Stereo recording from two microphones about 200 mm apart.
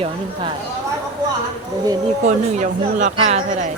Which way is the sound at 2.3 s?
40° right (ahead or behind).